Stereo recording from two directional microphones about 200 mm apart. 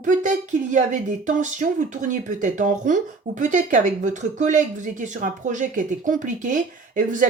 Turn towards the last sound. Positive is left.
turn(degrees=-40)  # may be behind; listen again after turning